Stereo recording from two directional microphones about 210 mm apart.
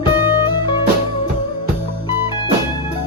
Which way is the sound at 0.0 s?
20° left (ahead or behind).